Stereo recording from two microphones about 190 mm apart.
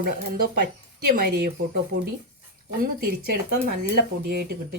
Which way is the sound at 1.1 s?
50° right (ahead or behind).